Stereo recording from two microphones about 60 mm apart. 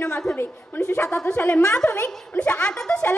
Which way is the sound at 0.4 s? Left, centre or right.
Left.